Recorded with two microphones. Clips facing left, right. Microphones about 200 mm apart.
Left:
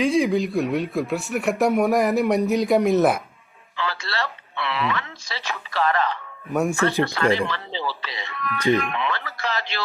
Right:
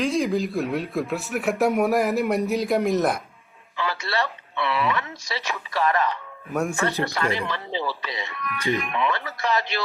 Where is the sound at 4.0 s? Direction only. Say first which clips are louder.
Right 2 dB; 20° right (ahead or behind).